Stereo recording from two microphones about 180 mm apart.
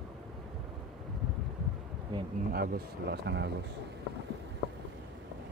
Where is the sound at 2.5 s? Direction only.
55° right (ahead or behind).